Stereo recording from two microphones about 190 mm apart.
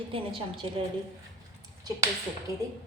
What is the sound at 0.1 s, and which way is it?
Speech, 25° right (ahead or behind).